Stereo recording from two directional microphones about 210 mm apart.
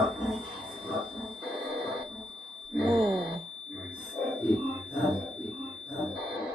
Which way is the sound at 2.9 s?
25° right (ahead or behind).